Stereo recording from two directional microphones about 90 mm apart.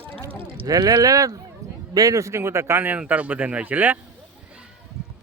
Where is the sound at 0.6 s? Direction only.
40° right (ahead or behind); by 4.0 s 15° right (ahead or behind).